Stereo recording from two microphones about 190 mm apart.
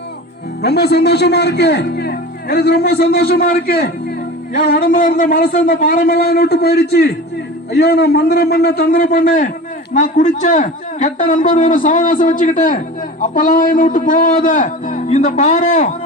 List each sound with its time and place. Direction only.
0.6 s a man's voice: 60° left (ahead or behind); by 15.9 s 40° left (ahead or behind)